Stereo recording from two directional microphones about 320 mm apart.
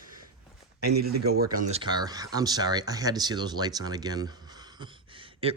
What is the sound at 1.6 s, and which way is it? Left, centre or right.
Speech, centre.